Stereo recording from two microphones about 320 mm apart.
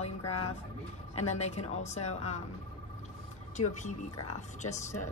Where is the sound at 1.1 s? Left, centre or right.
Left.